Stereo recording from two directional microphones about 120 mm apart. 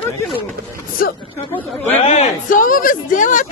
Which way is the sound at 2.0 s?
60° left (ahead or behind).